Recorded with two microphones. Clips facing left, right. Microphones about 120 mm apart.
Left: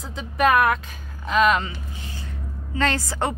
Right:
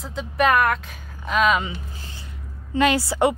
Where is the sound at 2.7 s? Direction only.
10° right (ahead or behind).